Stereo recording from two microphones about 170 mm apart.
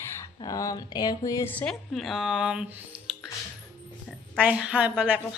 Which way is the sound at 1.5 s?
5° left (ahead or behind).